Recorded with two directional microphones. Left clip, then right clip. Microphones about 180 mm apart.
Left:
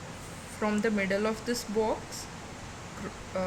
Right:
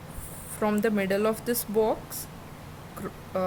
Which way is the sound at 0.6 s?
45° right (ahead or behind).